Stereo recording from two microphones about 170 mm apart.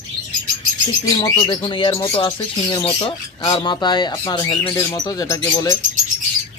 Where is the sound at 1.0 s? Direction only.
20° left (ahead or behind).